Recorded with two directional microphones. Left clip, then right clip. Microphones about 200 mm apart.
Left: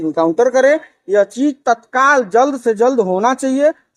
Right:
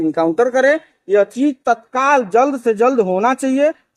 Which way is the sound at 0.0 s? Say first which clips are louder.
Left 1 dB; 15° right (ahead or behind).